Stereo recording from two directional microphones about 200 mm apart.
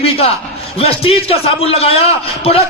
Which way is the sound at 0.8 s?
30° left (ahead or behind).